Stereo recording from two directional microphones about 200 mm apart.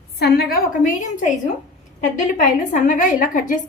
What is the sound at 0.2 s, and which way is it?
A woman's voice, 50° left (ahead or behind).